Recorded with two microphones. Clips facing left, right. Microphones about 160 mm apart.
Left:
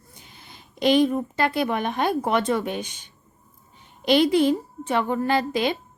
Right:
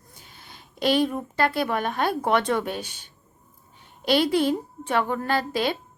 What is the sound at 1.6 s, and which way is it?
A woman's voice, 15° left (ahead or behind).